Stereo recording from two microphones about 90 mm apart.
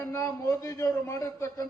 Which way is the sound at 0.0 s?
40° left (ahead or behind).